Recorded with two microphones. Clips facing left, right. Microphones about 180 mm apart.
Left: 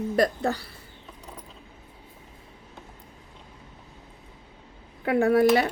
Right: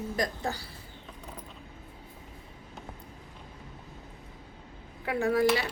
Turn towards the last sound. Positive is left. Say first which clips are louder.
# left 6 dB
turn(degrees=60)  # may be behind; listen again after turning